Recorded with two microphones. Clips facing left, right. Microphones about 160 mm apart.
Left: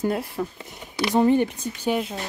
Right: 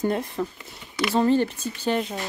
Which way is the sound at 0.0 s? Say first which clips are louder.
Even; 5° left (ahead or behind).